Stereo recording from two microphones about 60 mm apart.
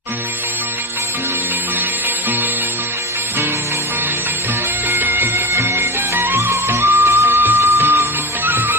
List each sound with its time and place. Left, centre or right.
4.9 s music: right